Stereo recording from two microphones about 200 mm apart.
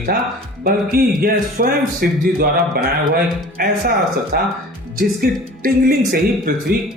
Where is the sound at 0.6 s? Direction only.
50° right (ahead or behind).